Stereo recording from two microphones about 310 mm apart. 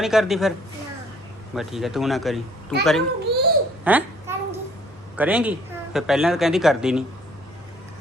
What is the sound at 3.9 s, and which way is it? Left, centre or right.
Speech, centre.